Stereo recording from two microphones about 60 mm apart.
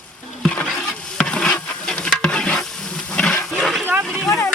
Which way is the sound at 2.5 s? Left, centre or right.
Centre.